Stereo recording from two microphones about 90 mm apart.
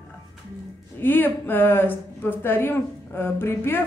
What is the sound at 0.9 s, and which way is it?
Speech, 20° left (ahead or behind).